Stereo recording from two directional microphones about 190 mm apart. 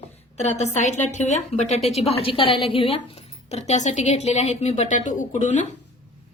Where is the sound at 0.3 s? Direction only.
35° left (ahead or behind).